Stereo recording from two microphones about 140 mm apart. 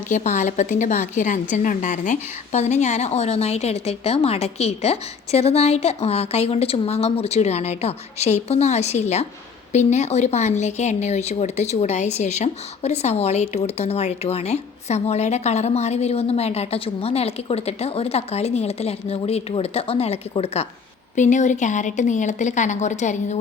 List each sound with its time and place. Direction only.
0.1 s speech: 60° left (ahead or behind); by 20.7 s 45° left (ahead or behind)
21.2 s a woman's voice: 60° left (ahead or behind)